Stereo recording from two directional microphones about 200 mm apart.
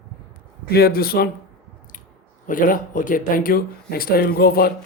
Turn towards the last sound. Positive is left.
turn(degrees=50)  # may be behind; listen again after turning